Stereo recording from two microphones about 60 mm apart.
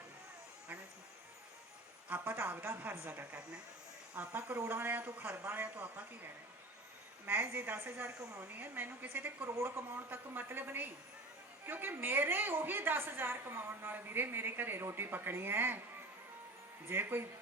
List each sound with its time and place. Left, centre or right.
2.0 s a woman's voice: right
4.1 s a woman's voice: right
5.4 s speech: right
5.6 s speech: right
7.3 s a woman's voice: right
9.5 s speech: right
9.9 s a woman's voice: right
16.9 s a woman's voice: right